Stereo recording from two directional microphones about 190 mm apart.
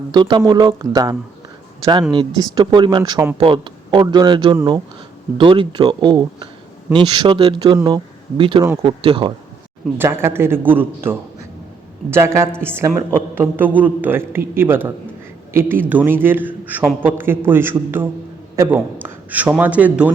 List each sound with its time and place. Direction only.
0.1 s speech: 25° right (ahead or behind)
10.0 s a woman's voice: 10° right (ahead or behind)